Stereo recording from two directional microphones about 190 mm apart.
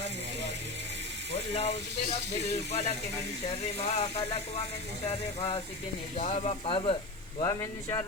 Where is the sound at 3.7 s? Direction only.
35° left (ahead or behind).